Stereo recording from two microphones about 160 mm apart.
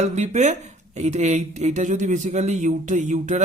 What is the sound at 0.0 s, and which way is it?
Speech, 45° right (ahead or behind).